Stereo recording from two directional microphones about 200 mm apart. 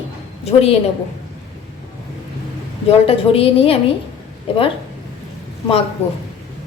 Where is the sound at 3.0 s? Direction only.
30° left (ahead or behind).